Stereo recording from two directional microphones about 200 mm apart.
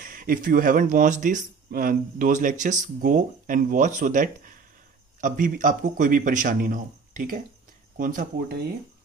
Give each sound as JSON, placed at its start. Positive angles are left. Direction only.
{"t": 0.0, "sound": "speech", "side_deg": -45}